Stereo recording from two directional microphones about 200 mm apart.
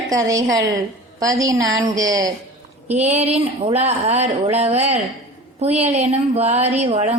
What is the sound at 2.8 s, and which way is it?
A woman's voice, 35° right (ahead or behind).